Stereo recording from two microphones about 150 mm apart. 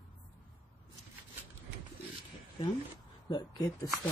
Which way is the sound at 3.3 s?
25° left (ahead or behind).